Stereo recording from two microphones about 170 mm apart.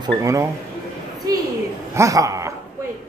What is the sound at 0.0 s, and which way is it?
Speech, 20° right (ahead or behind).